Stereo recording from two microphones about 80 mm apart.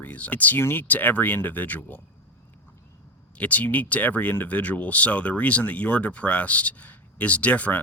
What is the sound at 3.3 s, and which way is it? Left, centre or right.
Speech, centre.